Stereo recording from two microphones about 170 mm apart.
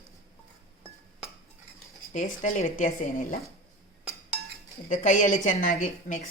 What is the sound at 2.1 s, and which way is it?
Speech, 45° left (ahead or behind).